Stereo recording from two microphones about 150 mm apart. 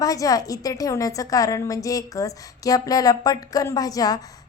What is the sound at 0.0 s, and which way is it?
A woman's voice, 25° left (ahead or behind).